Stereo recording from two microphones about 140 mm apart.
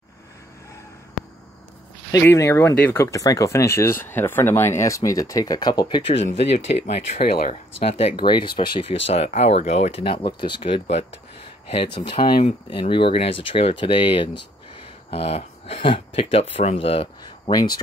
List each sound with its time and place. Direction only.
2.1 s speech: 20° left (ahead or behind)
6.2 s speech: 50° left (ahead or behind)
7.2 s speech: 90° left
8.2 s speech: 35° left (ahead or behind)
17.5 s speech: 30° left (ahead or behind)